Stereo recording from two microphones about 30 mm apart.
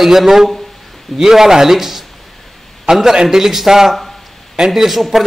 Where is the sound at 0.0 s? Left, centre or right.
Centre.